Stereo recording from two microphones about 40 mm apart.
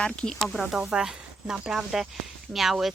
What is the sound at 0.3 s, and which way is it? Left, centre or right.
Speech, centre.